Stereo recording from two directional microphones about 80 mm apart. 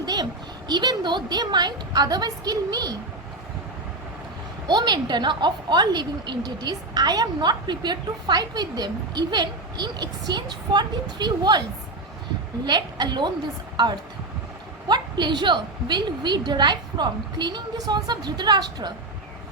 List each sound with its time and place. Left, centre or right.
0.0 s a sound: right
0.7 s a woman's voice: right
4.7 s a woman's voice: right
12.6 s a woman's voice: right